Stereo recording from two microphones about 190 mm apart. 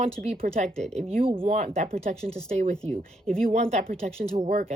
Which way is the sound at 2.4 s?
40° right (ahead or behind).